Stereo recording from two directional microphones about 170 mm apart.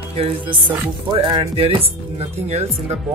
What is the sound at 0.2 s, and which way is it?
Speech, 30° right (ahead or behind).